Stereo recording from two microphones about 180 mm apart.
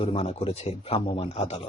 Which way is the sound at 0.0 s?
30° left (ahead or behind).